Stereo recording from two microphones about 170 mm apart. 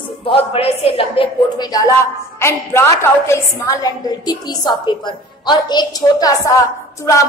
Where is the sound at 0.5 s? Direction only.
35° left (ahead or behind).